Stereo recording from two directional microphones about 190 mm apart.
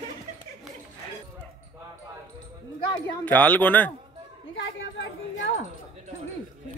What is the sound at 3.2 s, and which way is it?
Speech, 10° left (ahead or behind).